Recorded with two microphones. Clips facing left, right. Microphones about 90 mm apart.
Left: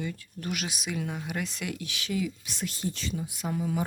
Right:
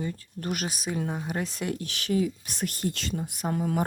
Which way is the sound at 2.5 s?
55° right (ahead or behind).